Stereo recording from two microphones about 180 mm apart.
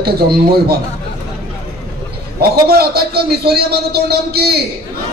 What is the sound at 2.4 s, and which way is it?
A man's voice, 60° right (ahead or behind).